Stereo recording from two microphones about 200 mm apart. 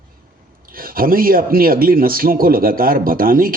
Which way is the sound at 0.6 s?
45° right (ahead or behind).